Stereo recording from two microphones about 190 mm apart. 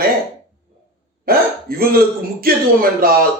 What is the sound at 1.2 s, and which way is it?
A man's voice, 50° right (ahead or behind).